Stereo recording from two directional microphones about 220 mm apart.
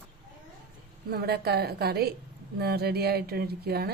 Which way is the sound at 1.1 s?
45° right (ahead or behind).